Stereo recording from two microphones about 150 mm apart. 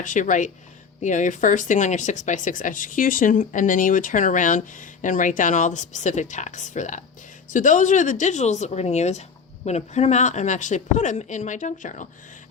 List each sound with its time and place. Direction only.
0.0 s a woman's voice: 60° left (ahead or behind)